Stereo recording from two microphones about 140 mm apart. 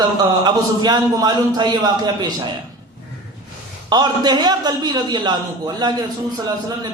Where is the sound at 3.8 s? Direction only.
30° right (ahead or behind).